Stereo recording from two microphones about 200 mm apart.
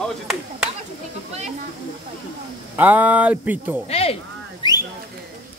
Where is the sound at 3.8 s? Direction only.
30° left (ahead or behind).